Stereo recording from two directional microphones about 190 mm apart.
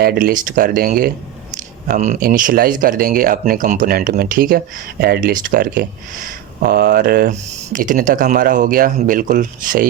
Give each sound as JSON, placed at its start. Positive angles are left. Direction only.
{"t": 0.0, "sound": "speech", "side_deg": -50}